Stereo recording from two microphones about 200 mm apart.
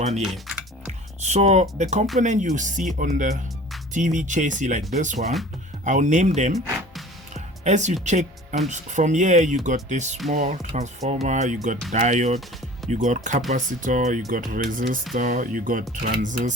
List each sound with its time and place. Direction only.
0.2 s speech: centre (ahead or behind)
1.2 s speech: 35° right (ahead or behind)
7.3 s music: 35° right (ahead or behind)
8.0 s speech: 35° right (ahead or behind)